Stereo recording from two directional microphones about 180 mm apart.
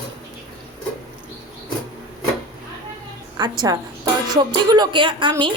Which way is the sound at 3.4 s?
20° right (ahead or behind).